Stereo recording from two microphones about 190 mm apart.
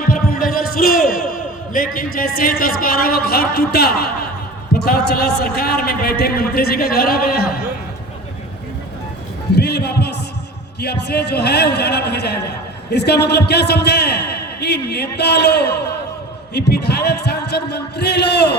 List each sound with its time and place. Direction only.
0.1 s a man's voice: 50° left (ahead or behind)
9.6 s a sound: 60° left (ahead or behind)
10.8 s a man's voice: 60° left (ahead or behind)